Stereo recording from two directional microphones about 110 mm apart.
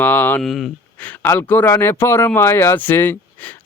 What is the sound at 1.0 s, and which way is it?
A man's voice, 15° left (ahead or behind).